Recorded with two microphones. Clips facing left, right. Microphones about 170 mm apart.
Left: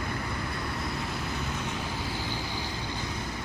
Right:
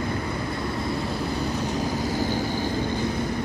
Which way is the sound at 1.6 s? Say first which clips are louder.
Right 8 dB; 40° right (ahead or behind).